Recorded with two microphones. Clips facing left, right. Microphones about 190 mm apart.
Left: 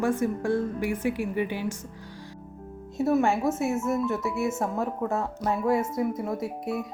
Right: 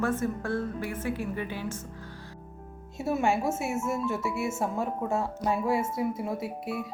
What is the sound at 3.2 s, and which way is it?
Speech, 25° right (ahead or behind).